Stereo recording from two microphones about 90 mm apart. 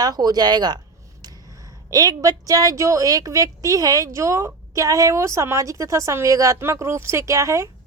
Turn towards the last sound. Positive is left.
turn(degrees=-35)  # may be behind; listen again after turning